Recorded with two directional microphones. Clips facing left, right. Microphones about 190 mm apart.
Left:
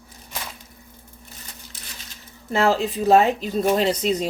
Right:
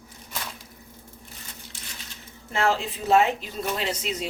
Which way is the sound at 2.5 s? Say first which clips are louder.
Left 5 dB; 40° left (ahead or behind).